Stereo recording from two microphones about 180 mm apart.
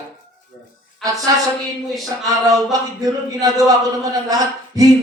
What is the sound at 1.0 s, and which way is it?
Speech, centre (ahead or behind).